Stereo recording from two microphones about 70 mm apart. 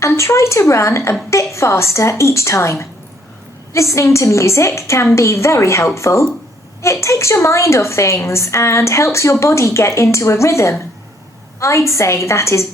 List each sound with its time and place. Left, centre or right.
0.0 s a woman's voice: left